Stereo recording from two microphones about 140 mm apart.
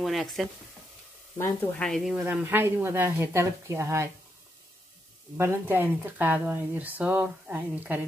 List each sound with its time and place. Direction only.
0.0 s speech: centre (ahead or behind)
1.4 s speech: 10° left (ahead or behind)
2.2 s speech: 15° right (ahead or behind)
5.4 s speech: 15° right (ahead or behind)